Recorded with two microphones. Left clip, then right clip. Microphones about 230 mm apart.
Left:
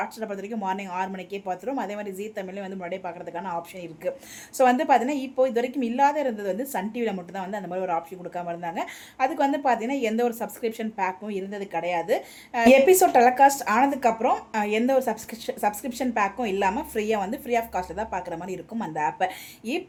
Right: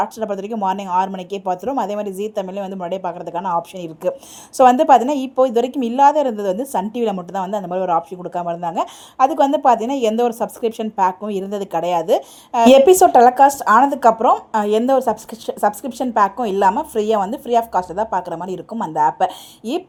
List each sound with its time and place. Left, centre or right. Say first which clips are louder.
0.0 s a woman's voice: right 10 dB; right